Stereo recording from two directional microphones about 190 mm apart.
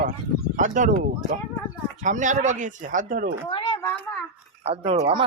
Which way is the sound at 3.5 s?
25° left (ahead or behind).